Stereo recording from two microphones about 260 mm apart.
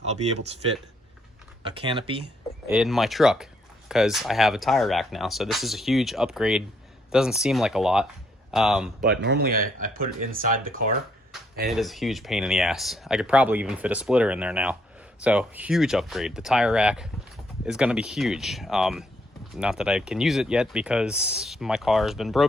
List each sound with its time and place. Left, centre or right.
1.6 s speech: centre
2.6 s speech: centre
9.0 s speech: right
11.7 s speech: centre